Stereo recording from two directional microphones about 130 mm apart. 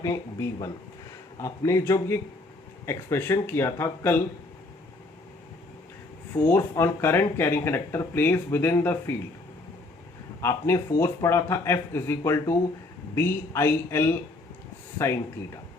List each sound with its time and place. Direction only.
0.0 s speech: 25° left (ahead or behind)
6.3 s speech: 15° left (ahead or behind)
10.4 s speech: 20° left (ahead or behind)